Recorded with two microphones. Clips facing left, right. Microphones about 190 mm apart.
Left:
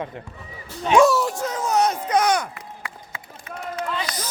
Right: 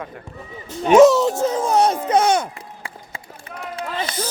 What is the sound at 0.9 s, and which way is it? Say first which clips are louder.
Speech: right 6 dB; 20° right (ahead or behind).